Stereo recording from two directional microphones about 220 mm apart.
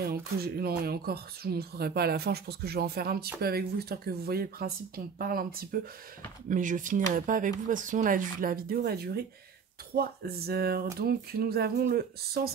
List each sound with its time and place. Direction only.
0.1 s speech: 45° right (ahead or behind)